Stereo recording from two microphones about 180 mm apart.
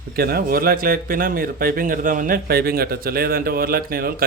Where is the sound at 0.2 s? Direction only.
60° right (ahead or behind).